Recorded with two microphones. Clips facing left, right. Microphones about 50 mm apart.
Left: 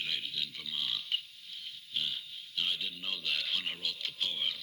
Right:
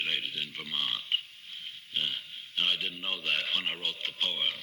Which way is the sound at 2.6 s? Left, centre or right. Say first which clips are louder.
Right 5 dB; right.